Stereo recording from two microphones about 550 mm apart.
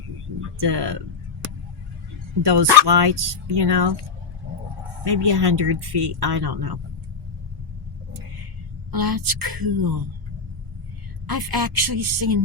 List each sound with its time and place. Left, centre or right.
0.6 s speech: right
2.4 s speech: right
5.0 s speech: right
8.9 s a woman's voice: right
11.3 s a woman's voice: right